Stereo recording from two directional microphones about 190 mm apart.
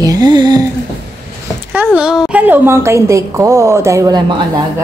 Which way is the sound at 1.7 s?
5° right (ahead or behind).